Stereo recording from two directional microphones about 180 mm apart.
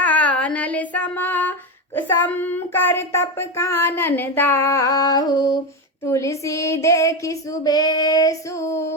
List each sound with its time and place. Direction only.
0.0 s child singing: 10° left (ahead or behind)